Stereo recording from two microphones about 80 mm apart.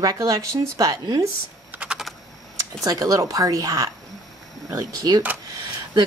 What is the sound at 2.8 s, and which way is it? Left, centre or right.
Speech, right.